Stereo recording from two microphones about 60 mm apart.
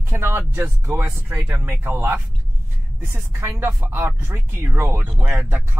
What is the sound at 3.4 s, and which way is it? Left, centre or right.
Speech, right.